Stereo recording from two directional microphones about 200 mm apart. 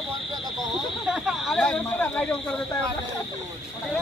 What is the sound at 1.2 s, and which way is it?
Speech, centre (ahead or behind).